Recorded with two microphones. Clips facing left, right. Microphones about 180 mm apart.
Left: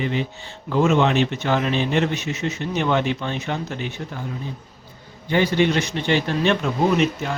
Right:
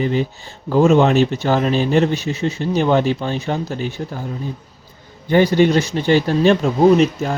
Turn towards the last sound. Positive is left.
turn(degrees=-35)  # may be behind; listen again after turning